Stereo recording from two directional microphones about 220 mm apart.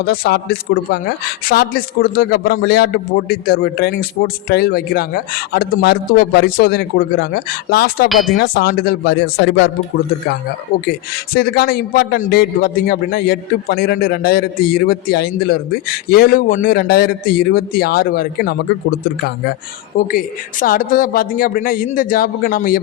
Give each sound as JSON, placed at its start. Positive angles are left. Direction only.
{"t": 0.0, "sound": "a man's voice", "side_deg": 45}
{"t": 8.1, "sound": "speech", "side_deg": 0}
{"t": 8.4, "sound": "a man's voice", "side_deg": 45}
{"t": 11.3, "sound": "a man's voice", "side_deg": 45}
{"t": 20.0, "sound": "speech", "side_deg": 40}